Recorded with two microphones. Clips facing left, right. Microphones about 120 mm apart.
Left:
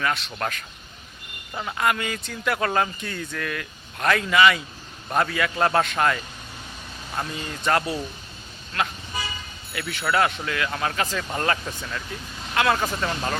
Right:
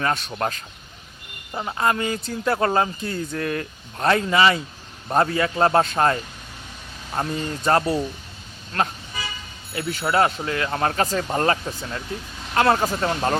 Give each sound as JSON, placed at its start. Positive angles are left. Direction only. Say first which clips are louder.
{"t": 0.0, "sound": "a man's voice", "louder": "right 2 dB", "side_deg": -45}
{"t": 0.3, "sound": "a man's voice", "louder": "right 3 dB", "side_deg": -30}